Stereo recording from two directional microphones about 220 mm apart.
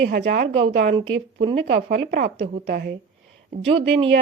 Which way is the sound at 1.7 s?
45° right (ahead or behind).